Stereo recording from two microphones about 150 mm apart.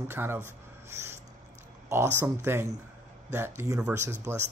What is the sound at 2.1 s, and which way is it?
Speech, 15° right (ahead or behind).